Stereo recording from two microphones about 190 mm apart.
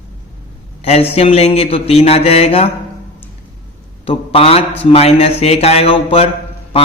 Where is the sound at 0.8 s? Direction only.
35° left (ahead or behind).